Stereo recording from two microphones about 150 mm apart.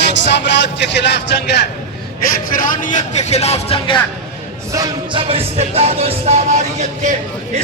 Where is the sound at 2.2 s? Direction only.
65° left (ahead or behind); by 4.0 s 40° left (ahead or behind).